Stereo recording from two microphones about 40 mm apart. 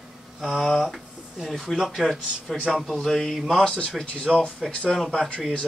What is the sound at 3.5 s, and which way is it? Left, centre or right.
Speech, centre.